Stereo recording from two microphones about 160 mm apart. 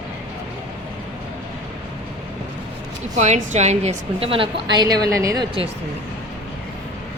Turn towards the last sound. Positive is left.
turn(degrees=-20)  # may be behind; listen again after turning